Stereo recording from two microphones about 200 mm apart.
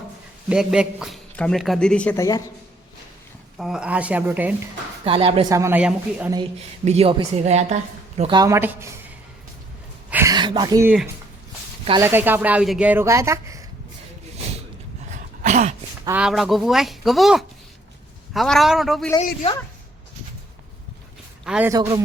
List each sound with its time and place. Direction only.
0.4 s a man's voice: 5° right (ahead or behind); by 2.4 s 15° left (ahead or behind)
3.6 s speech: 5° right (ahead or behind)
5.0 s speech: 25° right (ahead or behind); by 6.3 s 5° right (ahead or behind)
6.8 s a woman's voice: 30° right (ahead or behind); by 8.9 s 15° right (ahead or behind)
10.1 s a sound: 10° right (ahead or behind)
10.3 s a sound: 20° right (ahead or behind)
11.9 s speech: 15° right (ahead or behind)
15.1 s a sound: 35° right (ahead or behind)
16.0 s a man's voice: 5° right (ahead or behind)
21.4 s a man's voice: 5° right (ahead or behind)
21.7 s a woman's voice: 20° right (ahead or behind)